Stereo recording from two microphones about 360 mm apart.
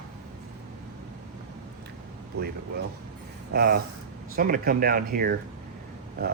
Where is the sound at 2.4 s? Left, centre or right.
Right.